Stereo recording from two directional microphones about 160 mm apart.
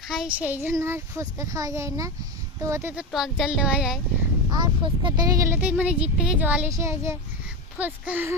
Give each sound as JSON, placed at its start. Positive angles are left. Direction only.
{"t": 0.1, "sound": "a child's voice", "side_deg": -5}
{"t": 2.9, "sound": "speech", "side_deg": -5}
{"t": 4.6, "sound": "speech", "side_deg": -30}
{"t": 5.5, "sound": "a child's voice", "side_deg": -10}